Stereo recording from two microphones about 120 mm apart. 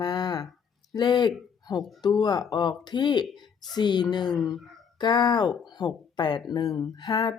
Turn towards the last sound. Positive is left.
turn(degrees=35)  # may be behind; listen again after turning